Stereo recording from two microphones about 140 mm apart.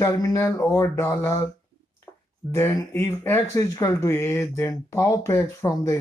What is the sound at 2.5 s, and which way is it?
Speech, 20° left (ahead or behind).